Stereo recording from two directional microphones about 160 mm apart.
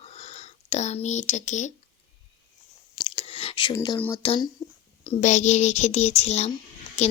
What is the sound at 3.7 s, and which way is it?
Speech, 25° left (ahead or behind).